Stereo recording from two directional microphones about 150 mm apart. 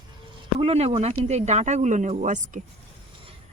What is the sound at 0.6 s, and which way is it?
Speech, 40° right (ahead or behind).